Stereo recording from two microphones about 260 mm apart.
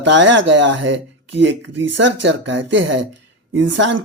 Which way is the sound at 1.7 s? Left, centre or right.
Right.